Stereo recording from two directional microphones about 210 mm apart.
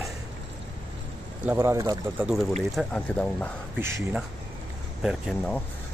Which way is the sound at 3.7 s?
10° right (ahead or behind).